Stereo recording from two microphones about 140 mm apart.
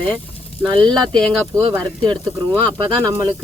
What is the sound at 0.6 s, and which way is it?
Speech, 20° right (ahead or behind).